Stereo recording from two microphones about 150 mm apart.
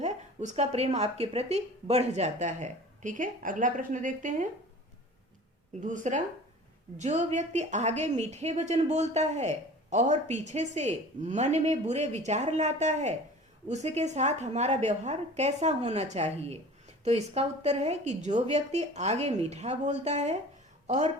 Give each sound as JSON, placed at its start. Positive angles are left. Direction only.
{"t": 0.0, "sound": "a woman's voice", "side_deg": -50}
{"t": 5.8, "sound": "a woman's voice", "side_deg": -55}